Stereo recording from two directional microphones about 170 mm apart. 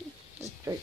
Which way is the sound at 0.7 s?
20° right (ahead or behind).